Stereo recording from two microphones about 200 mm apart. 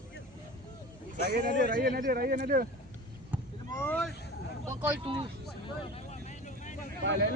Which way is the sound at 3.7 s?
10° left (ahead or behind).